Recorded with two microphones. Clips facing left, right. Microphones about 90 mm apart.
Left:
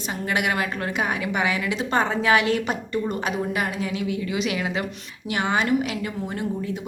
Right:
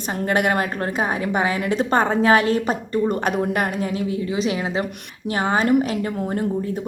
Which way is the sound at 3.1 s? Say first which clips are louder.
Right 4 dB; 50° right (ahead or behind).